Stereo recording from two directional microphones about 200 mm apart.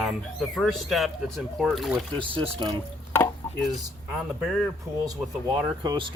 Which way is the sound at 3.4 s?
10° left (ahead or behind).